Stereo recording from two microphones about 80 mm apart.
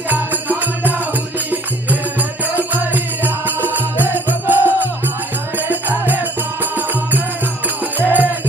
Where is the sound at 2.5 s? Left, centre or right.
Right.